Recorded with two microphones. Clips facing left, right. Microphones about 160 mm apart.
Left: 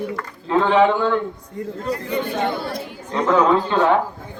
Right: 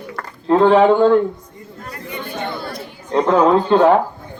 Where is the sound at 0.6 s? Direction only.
35° right (ahead or behind).